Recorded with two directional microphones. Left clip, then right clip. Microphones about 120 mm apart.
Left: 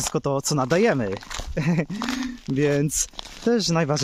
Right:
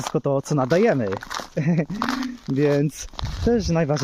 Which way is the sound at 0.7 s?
35° left (ahead or behind).